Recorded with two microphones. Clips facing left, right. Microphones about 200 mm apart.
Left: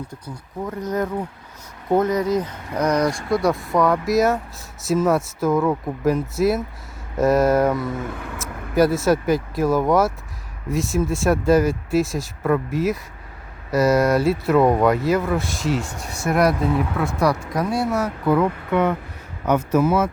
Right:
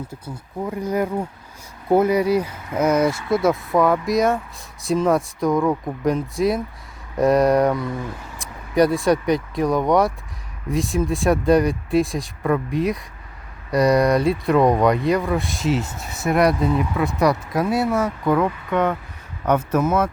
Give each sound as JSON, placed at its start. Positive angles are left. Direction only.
{"t": 0.1, "sound": "speech", "side_deg": -10}
{"t": 8.1, "sound": "speech", "side_deg": 60}
{"t": 8.7, "sound": "speech", "side_deg": 5}